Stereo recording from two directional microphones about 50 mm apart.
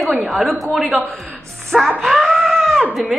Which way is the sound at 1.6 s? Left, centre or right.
Centre.